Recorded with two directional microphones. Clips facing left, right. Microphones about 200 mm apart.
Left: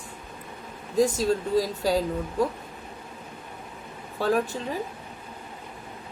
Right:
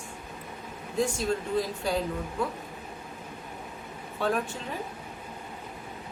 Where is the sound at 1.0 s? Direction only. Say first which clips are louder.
Left 5 dB; 35° left (ahead or behind).